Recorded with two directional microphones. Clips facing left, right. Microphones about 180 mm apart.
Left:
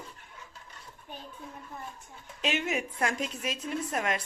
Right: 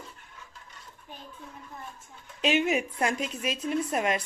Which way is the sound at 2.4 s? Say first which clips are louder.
Right 5 dB; 20° right (ahead or behind).